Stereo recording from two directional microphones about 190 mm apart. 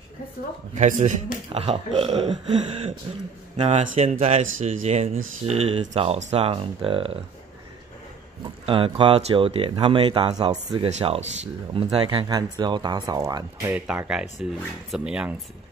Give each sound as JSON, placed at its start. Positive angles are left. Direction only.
{"t": 0.7, "sound": "speech", "side_deg": -40}
{"t": 8.6, "sound": "speech", "side_deg": -25}
{"t": 10.9, "sound": "speech", "side_deg": -35}
{"t": 13.7, "sound": "speech", "side_deg": -5}